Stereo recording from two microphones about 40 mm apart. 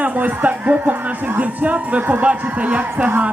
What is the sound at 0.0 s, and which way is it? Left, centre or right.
Speech, right.